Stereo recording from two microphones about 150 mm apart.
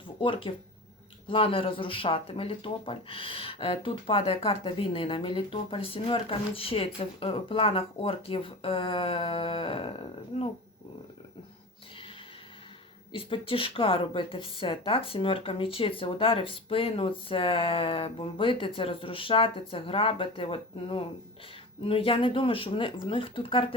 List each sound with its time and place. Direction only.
0.2 s speech: 35° left (ahead or behind)
13.1 s speech: 35° left (ahead or behind)